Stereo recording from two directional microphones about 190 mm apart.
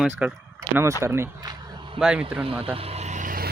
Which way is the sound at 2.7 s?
30° right (ahead or behind).